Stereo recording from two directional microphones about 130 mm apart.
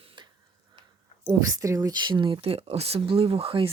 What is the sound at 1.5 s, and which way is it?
Speech, 25° right (ahead or behind).